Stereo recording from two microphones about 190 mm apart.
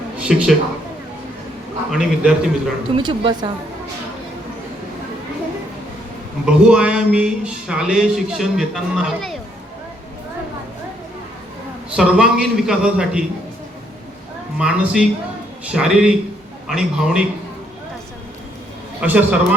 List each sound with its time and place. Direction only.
0.2 s a man's voice: 5° right (ahead or behind)
1.9 s a man's voice: 5° right (ahead or behind)
2.9 s speech: 25° right (ahead or behind)
6.4 s a man's voice: 5° right (ahead or behind)
11.9 s a man's voice: 5° right (ahead or behind)
14.6 s a man's voice: 5° right (ahead or behind)
19.0 s a man's voice: 10° right (ahead or behind)